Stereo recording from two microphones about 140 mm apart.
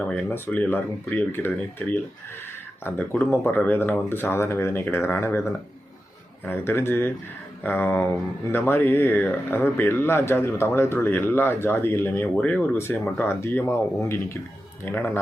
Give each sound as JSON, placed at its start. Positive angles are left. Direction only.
{"t": 0.0, "sound": "speech", "side_deg": 10}